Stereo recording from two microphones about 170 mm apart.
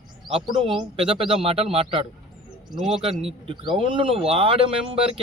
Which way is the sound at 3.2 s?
35° right (ahead or behind).